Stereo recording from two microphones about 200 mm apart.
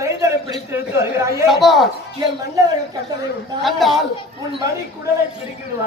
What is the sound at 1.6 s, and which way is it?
Speech, centre (ahead or behind).